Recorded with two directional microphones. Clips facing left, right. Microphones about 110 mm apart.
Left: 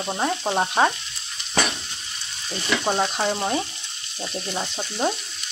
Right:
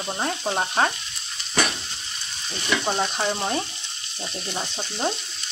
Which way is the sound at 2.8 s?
10° left (ahead or behind).